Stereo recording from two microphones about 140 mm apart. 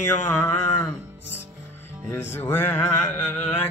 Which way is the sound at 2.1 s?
15° left (ahead or behind).